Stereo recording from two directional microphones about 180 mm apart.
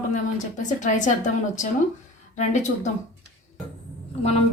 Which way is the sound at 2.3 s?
45° left (ahead or behind).